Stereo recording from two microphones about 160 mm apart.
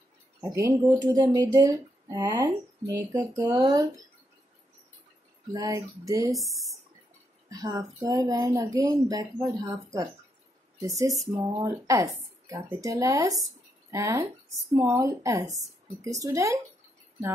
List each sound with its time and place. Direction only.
0.4 s speech: 20° right (ahead or behind)
5.5 s speech: 20° right (ahead or behind)
6.3 s speech: centre (ahead or behind)
7.4 s speech: 20° right (ahead or behind)